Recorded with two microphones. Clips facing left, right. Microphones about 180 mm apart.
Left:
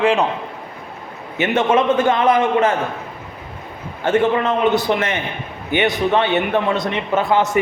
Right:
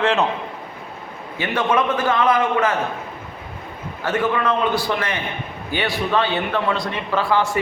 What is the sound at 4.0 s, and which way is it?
A man's voice, 25° left (ahead or behind).